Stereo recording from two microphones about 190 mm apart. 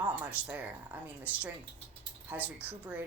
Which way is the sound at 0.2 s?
5° right (ahead or behind).